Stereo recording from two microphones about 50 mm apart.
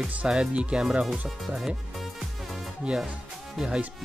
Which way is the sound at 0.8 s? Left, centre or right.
Centre.